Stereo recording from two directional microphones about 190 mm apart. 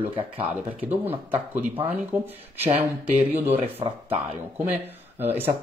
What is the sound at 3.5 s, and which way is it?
Speech, 30° right (ahead or behind).